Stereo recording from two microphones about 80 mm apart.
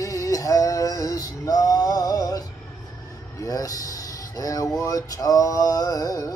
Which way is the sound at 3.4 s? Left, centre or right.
Left.